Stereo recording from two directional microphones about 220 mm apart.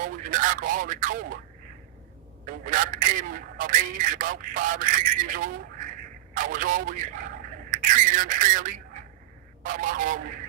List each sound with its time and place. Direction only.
0.0 s speech: 40° right (ahead or behind)
2.5 s speech: 40° right (ahead or behind)